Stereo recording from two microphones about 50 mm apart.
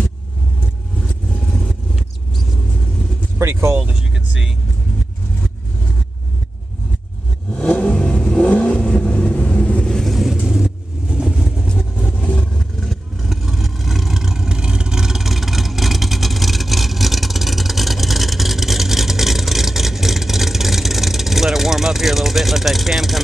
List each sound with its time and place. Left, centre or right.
3.3 s vehicle: right
3.9 s vehicle: centre
7.5 s vehicle: left
10.0 s vehicle: centre
10.4 s vehicle: centre
11.6 s vehicle: centre
12.5 s vehicle: centre